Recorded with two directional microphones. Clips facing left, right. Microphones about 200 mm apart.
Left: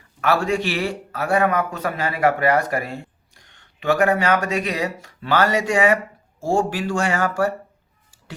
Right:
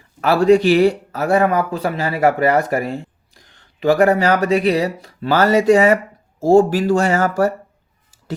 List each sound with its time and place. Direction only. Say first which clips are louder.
0.2 s speech: right 8 dB; 35° right (ahead or behind)